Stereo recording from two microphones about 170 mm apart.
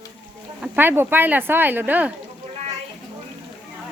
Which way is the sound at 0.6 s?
10° right (ahead or behind).